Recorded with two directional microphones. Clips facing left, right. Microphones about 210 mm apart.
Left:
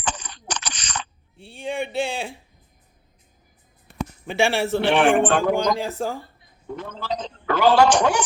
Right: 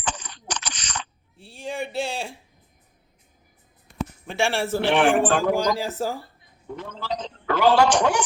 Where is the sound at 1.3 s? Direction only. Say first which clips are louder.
Left 3 dB; centre (ahead or behind).